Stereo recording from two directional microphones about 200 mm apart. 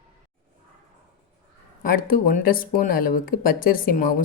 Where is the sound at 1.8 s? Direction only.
45° left (ahead or behind).